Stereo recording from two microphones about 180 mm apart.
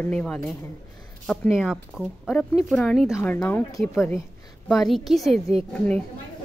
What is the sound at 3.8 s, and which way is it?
Speech, centre (ahead or behind).